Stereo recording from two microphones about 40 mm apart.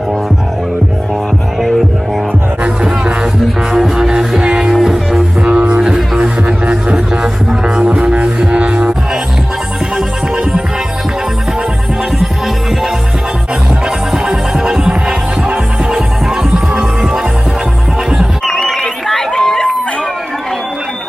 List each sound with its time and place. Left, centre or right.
3.7 s music: centre
5.4 s music: right
5.8 s music: right
13.8 s music: centre
18.4 s crowd: centre